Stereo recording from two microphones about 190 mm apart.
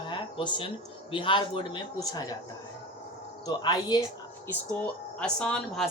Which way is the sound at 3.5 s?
20° left (ahead or behind).